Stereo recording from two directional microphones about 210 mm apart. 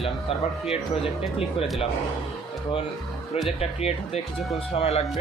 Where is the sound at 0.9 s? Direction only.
25° left (ahead or behind).